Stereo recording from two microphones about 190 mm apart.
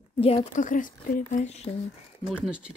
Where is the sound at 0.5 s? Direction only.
45° left (ahead or behind).